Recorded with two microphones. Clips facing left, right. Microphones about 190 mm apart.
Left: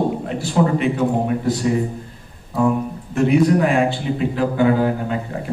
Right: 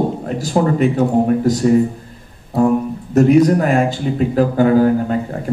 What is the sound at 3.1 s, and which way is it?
A man's voice, 40° right (ahead or behind).